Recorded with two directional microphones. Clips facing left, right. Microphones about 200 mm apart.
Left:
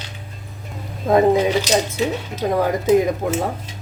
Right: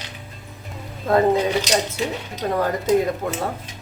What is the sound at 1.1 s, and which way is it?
A woman's voice, 15° left (ahead or behind).